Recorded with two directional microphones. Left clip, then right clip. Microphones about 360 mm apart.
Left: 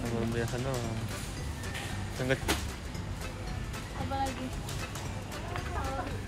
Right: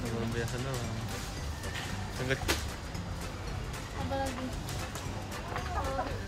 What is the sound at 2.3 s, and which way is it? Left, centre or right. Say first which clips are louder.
Speech: left 2 dB; centre.